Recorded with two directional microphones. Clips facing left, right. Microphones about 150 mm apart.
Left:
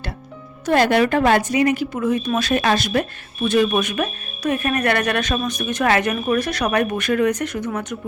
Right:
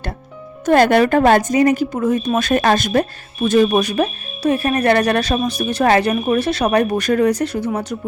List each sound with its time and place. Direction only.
0.6 s speech: 50° right (ahead or behind); by 7.9 s 30° right (ahead or behind)